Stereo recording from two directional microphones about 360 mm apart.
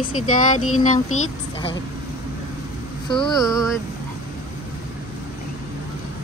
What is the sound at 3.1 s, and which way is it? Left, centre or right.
Speech, centre.